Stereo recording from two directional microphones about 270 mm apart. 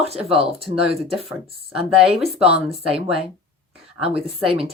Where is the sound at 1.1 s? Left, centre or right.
Centre.